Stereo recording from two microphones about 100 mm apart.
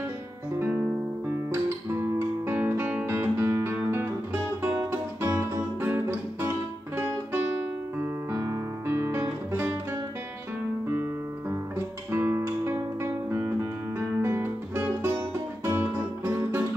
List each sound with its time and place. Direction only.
0.6 s guitar: 20° right (ahead or behind)
3.1 s music: 25° right (ahead or behind)
12.1 s guitar: 25° right (ahead or behind)
14.0 s music: 25° right (ahead or behind)